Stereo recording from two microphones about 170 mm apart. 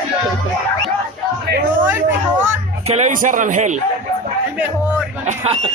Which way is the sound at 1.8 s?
10° right (ahead or behind).